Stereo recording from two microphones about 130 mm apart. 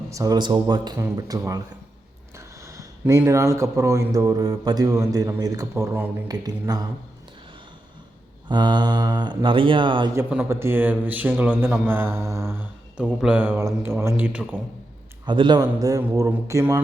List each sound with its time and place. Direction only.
0.1 s speech: 25° right (ahead or behind)
0.9 s speech: 25° right (ahead or behind)
6.2 s speech: 30° right (ahead or behind)
8.4 s speech: 35° right (ahead or behind)
10.2 s speech: 10° right (ahead or behind)
15.3 s speech: 35° right (ahead or behind)